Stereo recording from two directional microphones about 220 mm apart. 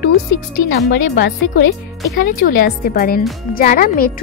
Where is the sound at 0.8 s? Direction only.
55° left (ahead or behind).